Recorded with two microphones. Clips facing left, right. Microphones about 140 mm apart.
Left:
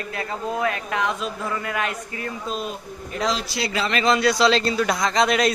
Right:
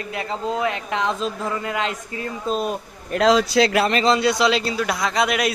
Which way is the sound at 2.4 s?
40° right (ahead or behind).